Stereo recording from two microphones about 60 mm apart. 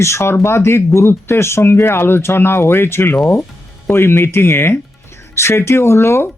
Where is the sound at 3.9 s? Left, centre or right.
Left.